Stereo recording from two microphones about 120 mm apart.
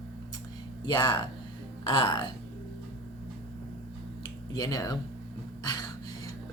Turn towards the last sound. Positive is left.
turn(degrees=35)  # may be behind; listen again after turning